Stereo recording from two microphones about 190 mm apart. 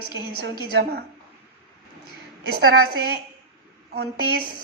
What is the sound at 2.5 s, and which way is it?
A woman's voice, 55° right (ahead or behind).